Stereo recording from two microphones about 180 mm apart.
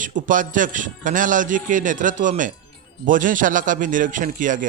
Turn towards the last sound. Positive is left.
turn(degrees=-45)  # may be behind; listen again after turning